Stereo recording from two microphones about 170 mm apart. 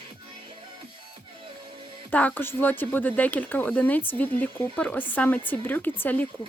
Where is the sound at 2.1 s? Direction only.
10° left (ahead or behind).